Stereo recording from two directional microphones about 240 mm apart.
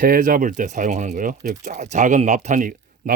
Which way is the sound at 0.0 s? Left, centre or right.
Right.